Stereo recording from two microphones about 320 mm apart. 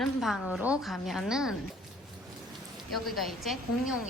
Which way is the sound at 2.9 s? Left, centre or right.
Centre.